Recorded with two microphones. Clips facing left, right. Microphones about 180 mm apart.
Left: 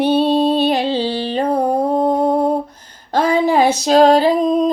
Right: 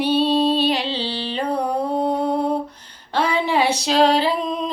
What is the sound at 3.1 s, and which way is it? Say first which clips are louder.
Female singing: left 6 dB; 45° left (ahead or behind).